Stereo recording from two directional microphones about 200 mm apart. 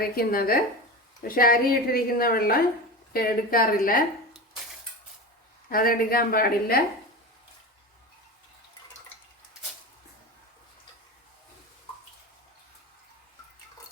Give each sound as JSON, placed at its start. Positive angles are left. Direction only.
{"t": 0.2, "sound": "a woman's voice", "side_deg": 50}
{"t": 5.6, "sound": "a woman's voice", "side_deg": 45}